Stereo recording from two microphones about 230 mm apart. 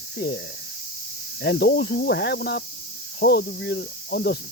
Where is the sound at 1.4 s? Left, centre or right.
Left.